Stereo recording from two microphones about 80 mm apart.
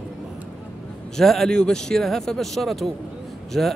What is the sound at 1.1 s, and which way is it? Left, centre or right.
Speech, centre.